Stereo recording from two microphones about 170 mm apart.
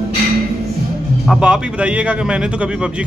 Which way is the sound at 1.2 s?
Centre (ahead or behind).